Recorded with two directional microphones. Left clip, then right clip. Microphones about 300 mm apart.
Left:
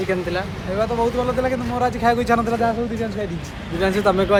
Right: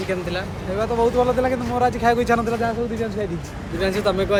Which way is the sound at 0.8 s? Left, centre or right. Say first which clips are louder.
Right 2 dB; centre.